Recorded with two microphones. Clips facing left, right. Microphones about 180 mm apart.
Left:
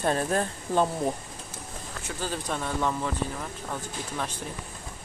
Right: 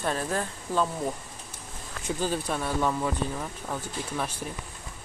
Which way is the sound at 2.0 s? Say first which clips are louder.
Right 4 dB; 15° right (ahead or behind).